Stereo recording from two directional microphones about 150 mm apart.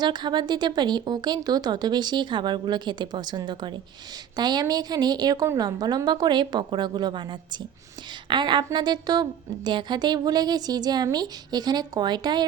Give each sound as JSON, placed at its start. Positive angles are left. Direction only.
{"t": 0.0, "sound": "speech", "side_deg": -30}